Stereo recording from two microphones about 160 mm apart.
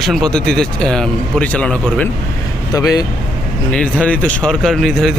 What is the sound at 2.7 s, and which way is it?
Speech, 20° left (ahead or behind).